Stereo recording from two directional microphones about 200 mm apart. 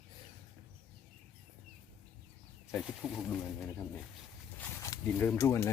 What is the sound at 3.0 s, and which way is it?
Speech, centre (ahead or behind).